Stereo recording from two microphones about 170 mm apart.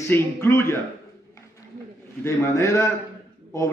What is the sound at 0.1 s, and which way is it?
Speech, 15° left (ahead or behind).